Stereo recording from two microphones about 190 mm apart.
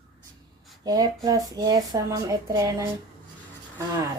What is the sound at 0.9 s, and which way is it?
Speech, 20° right (ahead or behind).